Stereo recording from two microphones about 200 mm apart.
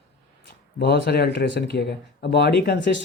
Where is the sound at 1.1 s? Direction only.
55° left (ahead or behind).